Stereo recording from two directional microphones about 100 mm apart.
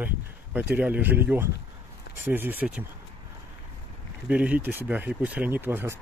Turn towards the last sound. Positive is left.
turn(degrees=-25)  # may be behind; listen again after turning